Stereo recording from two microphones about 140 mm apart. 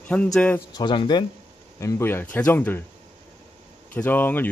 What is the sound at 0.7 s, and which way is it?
Speech, 30° left (ahead or behind).